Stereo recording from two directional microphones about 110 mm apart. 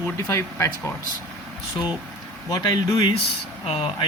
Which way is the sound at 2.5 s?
35° left (ahead or behind).